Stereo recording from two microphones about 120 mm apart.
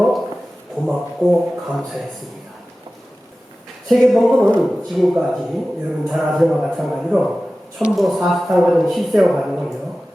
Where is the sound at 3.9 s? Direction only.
Centre (ahead or behind).